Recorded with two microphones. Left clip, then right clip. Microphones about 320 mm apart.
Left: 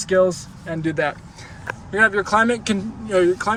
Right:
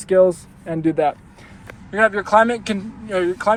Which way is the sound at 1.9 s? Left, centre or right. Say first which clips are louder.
Right 1 dB; centre.